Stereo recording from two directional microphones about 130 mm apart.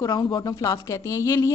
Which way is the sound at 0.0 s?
30° left (ahead or behind).